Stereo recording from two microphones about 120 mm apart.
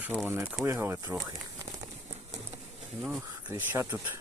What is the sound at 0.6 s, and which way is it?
Speech, 20° right (ahead or behind).